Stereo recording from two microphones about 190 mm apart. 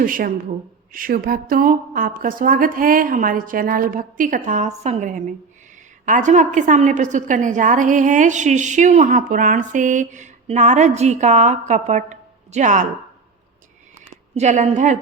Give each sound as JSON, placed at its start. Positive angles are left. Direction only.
{"t": 0.0, "sound": "a woman's voice", "side_deg": -45}
{"t": 14.3, "sound": "a woman's voice", "side_deg": -35}